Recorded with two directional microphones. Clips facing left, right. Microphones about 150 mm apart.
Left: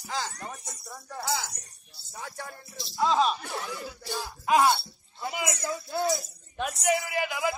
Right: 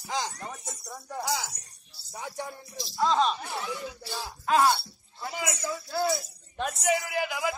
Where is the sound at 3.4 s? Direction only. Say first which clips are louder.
Right 1 dB; 55° left (ahead or behind).